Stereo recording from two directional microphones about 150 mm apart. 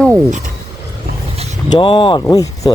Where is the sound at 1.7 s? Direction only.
35° left (ahead or behind).